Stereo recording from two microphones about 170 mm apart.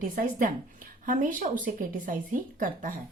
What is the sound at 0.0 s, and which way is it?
Speech, 55° right (ahead or behind).